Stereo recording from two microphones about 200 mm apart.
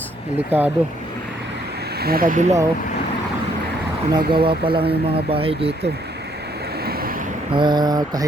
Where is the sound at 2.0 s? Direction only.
50° right (ahead or behind).